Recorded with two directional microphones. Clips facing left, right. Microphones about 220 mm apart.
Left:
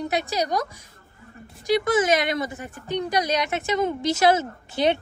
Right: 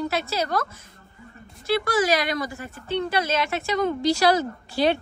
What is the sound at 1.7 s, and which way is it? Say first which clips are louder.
A woman's voice: left 2 dB; 20° left (ahead or behind).